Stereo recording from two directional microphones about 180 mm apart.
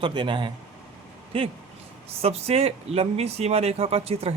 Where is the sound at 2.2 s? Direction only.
35° right (ahead or behind).